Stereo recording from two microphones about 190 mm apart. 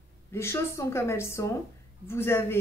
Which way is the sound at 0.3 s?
15° left (ahead or behind).